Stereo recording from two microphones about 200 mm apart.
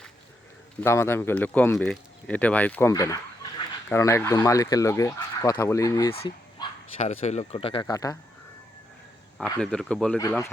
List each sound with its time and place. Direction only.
0.8 s speech: 10° left (ahead or behind)
6.9 s speech: 30° left (ahead or behind)
9.6 s speech: 5° left (ahead or behind)
10.2 s speech: 15° left (ahead or behind)